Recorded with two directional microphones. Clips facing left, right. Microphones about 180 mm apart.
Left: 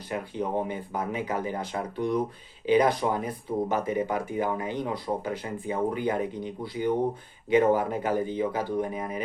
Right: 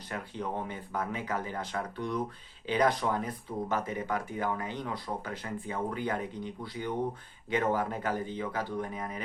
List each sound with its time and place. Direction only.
0.1 s speech: 15° left (ahead or behind)